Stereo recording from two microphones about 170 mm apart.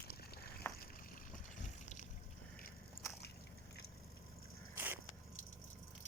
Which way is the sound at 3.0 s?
55° left (ahead or behind).